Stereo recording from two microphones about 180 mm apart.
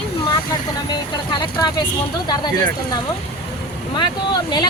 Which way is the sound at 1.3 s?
25° left (ahead or behind).